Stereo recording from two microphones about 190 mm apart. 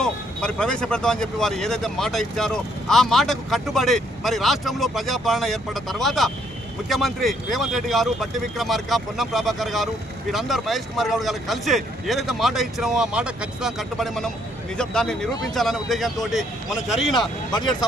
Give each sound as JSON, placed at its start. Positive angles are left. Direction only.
{"t": 0.0, "sound": "speech", "side_deg": 5}
{"t": 15.3, "sound": "speech", "side_deg": 20}
{"t": 15.5, "sound": "speech", "side_deg": 0}